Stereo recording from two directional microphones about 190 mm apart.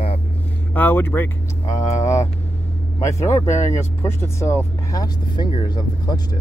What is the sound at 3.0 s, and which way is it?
Speech, 15° left (ahead or behind).